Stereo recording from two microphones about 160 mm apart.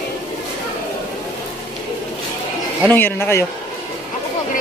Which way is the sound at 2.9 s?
15° left (ahead or behind).